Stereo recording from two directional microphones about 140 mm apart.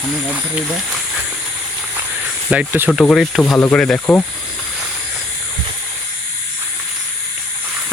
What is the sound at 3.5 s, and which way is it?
Speech, 15° left (ahead or behind).